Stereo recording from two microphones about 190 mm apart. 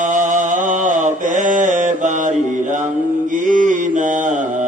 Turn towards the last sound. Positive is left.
turn(degrees=-40)  # may be behind; listen again after turning